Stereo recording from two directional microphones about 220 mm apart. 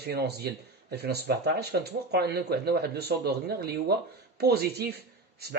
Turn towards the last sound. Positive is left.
turn(degrees=-45)  # may be behind; listen again after turning